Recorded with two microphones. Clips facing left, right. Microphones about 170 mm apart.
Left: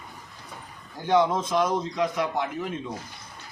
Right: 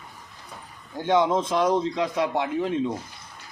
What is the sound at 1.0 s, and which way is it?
A man's voice, 20° right (ahead or behind).